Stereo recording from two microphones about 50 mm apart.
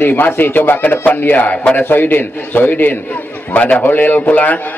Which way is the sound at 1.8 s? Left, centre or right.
Left.